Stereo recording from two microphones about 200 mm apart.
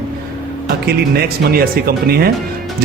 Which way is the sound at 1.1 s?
50° right (ahead or behind).